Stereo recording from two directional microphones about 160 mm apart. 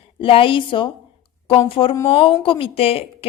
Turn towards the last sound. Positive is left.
turn(degrees=35)  # may be behind; listen again after turning